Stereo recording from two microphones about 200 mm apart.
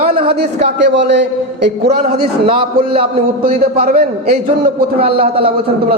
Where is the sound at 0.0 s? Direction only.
25° right (ahead or behind).